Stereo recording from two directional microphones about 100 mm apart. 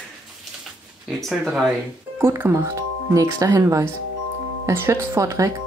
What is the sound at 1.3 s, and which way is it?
Speech, centre (ahead or behind).